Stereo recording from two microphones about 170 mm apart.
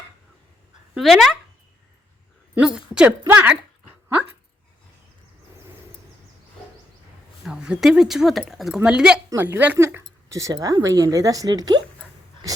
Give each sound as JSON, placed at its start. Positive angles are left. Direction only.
{"t": 0.9, "sound": "a woman's voice", "side_deg": 0}
{"t": 2.6, "sound": "a woman's voice", "side_deg": -5}
{"t": 7.4, "sound": "a woman's voice", "side_deg": -5}